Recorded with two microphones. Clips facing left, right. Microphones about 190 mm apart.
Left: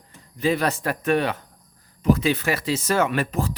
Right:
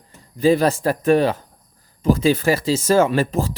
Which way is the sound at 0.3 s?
35° right (ahead or behind).